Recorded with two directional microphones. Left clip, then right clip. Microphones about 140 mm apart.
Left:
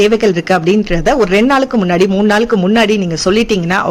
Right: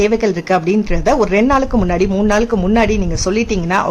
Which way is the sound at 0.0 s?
15° left (ahead or behind).